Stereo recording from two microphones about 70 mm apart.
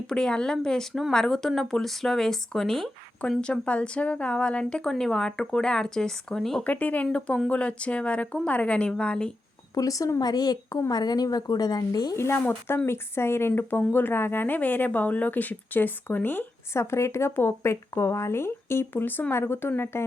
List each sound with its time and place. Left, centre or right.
0.1 s a woman's voice: centre
3.2 s a woman's voice: centre
6.7 s a woman's voice: left
9.7 s speech: left
10.2 s a woman's voice: left
12.1 s speech: left
16.7 s speech: left